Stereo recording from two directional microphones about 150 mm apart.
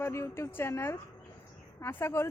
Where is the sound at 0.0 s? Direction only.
20° left (ahead or behind).